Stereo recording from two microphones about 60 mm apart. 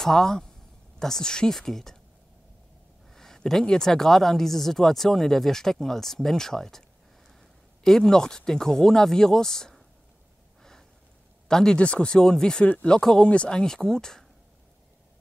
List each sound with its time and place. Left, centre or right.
0.0 s speech: centre
3.1 s speech: centre
7.8 s speech: centre
11.4 s speech: centre
12.6 s speech: left
12.9 s speech: centre